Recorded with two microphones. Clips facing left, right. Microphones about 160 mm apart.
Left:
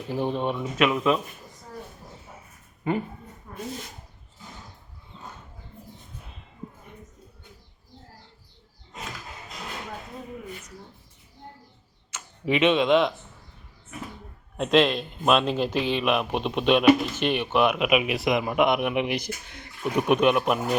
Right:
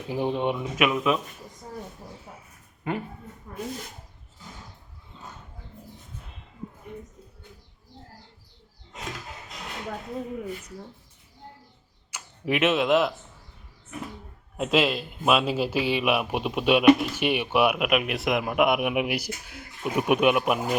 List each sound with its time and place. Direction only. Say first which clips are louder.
0.1 s speech: right 1 dB; 15° right (ahead or behind)
2.8 s speech: left 4 dB; centre (ahead or behind)
12.1 s speech: left 2 dB; 5° right (ahead or behind)
14.5 s speech: left 3 dB; 5° right (ahead or behind)
17.8 s speech: left 2 dB; centre (ahead or behind)